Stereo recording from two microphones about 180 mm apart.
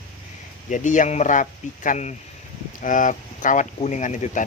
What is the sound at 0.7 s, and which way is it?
Speech, 45° left (ahead or behind).